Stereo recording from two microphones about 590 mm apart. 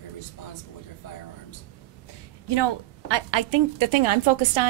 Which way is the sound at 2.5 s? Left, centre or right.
Right.